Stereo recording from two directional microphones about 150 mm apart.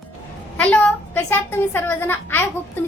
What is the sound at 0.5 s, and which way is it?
A woman's voice, 10° left (ahead or behind).